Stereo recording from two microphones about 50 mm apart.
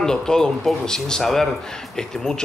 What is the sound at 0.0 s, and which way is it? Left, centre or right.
Speech, centre.